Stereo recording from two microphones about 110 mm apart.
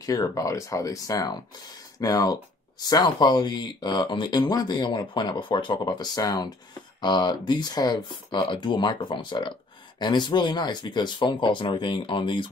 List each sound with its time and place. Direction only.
0.0 s speech: 35° left (ahead or behind)